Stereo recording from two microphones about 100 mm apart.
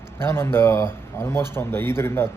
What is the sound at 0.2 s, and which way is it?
Speech, 25° left (ahead or behind).